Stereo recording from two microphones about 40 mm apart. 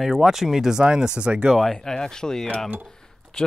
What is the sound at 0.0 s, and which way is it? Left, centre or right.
Speech, centre.